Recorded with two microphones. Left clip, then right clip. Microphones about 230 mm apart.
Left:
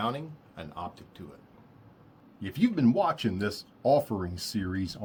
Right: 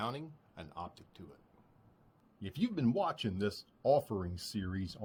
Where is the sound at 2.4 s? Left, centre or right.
Right.